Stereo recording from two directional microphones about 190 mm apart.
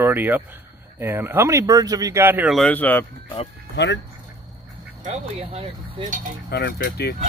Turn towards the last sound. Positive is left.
turn(degrees=55)  # may be behind; listen again after turning